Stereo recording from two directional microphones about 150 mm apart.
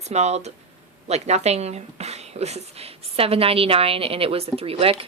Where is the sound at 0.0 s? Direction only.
45° right (ahead or behind).